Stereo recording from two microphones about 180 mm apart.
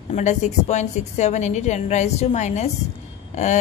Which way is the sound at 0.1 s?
40° left (ahead or behind).